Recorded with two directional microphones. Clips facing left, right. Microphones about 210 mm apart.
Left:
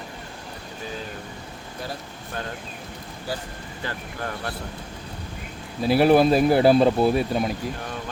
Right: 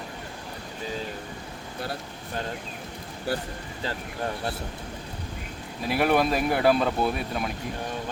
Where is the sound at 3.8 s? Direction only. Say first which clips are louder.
Right 1 dB; 25° right (ahead or behind).